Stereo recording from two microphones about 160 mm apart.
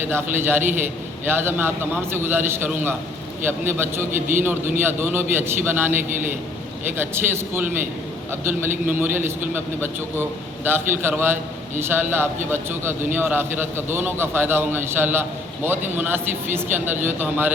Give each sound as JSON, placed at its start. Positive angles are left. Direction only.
{"t": 0.1, "sound": "a man's voice", "side_deg": -15}
{"t": 4.1, "sound": "a man's voice", "side_deg": -55}
{"t": 4.7, "sound": "a man's voice", "side_deg": -15}